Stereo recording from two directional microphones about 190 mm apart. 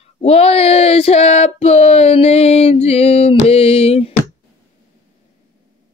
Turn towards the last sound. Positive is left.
turn(degrees=30)  # may be behind; listen again after turning